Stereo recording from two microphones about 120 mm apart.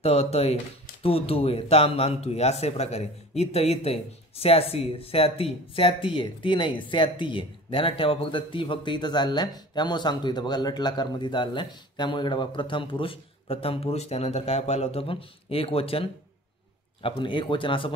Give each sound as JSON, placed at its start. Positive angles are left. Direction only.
{"t": 0.0, "sound": "speech", "side_deg": 60}